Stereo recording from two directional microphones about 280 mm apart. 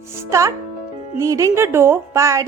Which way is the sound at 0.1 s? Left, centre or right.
Centre.